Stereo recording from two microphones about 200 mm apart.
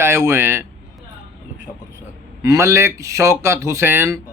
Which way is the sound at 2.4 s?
15° right (ahead or behind).